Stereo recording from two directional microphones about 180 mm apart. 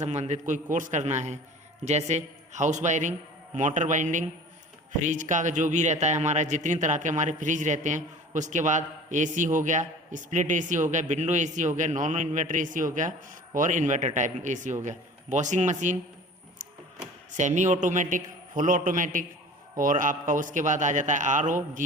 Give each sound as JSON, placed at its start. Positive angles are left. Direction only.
{"t": 0.0, "sound": "a man's voice", "side_deg": -40}
{"t": 17.3, "sound": "a man's voice", "side_deg": -40}